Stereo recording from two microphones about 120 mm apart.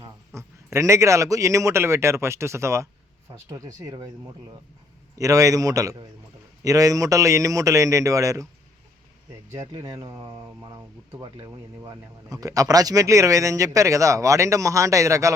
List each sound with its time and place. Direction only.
0.3 s speech: 25° right (ahead or behind)
5.1 s speech: 30° right (ahead or behind)
9.5 s speech: 25° right (ahead or behind)